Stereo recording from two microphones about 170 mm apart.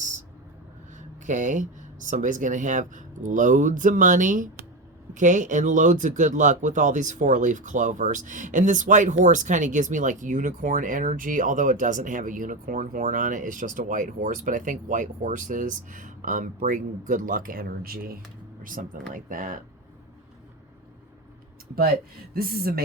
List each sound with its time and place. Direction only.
0.9 s speech: 45° right (ahead or behind)
22.4 s speech: 60° right (ahead or behind)